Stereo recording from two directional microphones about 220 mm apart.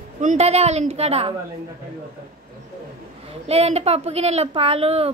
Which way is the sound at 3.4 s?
30° right (ahead or behind).